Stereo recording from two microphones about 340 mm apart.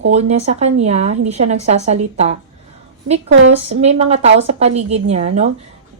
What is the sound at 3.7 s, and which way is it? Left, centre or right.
A woman's voice, centre.